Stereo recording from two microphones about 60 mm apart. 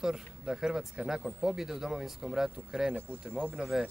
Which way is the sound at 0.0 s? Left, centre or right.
Centre.